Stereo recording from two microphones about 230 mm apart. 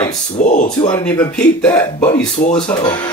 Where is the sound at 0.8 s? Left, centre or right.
Centre.